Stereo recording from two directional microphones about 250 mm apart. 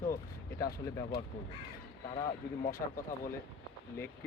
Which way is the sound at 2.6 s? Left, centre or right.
Left.